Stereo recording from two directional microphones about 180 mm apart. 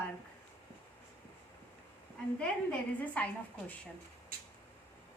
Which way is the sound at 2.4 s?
5° left (ahead or behind).